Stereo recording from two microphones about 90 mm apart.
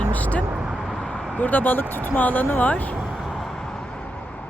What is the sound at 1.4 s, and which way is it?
Speech, 20° left (ahead or behind).